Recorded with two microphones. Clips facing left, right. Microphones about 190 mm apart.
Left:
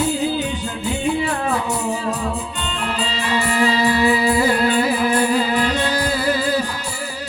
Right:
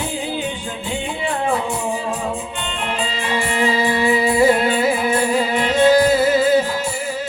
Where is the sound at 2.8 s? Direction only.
35° left (ahead or behind).